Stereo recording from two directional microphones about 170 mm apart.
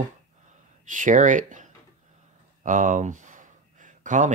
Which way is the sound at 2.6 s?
50° right (ahead or behind).